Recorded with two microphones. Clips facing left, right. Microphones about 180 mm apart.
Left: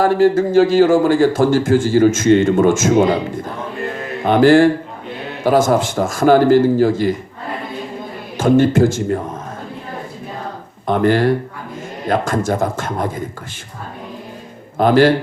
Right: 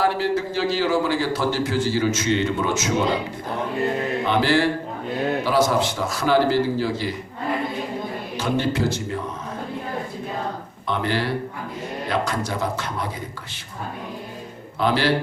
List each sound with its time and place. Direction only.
0.0 s a man's voice: 45° left (ahead or behind)
4.3 s a man's voice: 50° left (ahead or behind)
8.4 s a man's voice: 50° left (ahead or behind)
10.8 s a man's voice: 50° left (ahead or behind)
14.8 s a man's voice: 50° left (ahead or behind)